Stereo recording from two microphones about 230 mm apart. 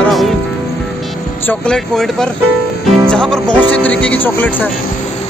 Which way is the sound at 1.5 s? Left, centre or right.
Centre.